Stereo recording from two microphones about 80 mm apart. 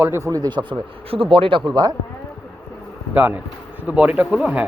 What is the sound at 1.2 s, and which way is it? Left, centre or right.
Speech, right.